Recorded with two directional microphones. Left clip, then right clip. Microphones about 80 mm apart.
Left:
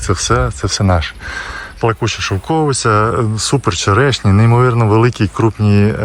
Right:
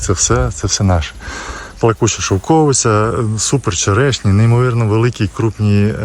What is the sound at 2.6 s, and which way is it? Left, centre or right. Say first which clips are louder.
Speech: even; right.